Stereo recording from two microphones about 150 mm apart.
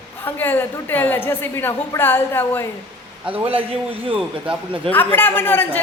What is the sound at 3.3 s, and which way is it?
Speech, 40° right (ahead or behind).